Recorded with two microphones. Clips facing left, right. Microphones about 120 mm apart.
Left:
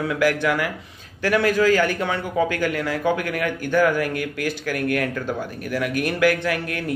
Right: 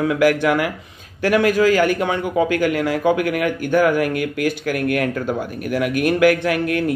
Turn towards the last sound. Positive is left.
turn(degrees=-15)  # may be behind; listen again after turning